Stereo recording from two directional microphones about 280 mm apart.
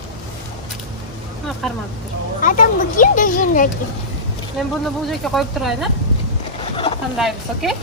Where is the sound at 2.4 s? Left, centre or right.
Left.